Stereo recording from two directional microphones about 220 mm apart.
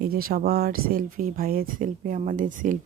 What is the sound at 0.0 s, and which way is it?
Speech, 45° right (ahead or behind).